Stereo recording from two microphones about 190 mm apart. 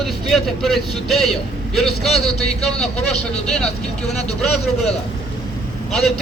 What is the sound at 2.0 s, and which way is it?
Speech, 35° left (ahead or behind).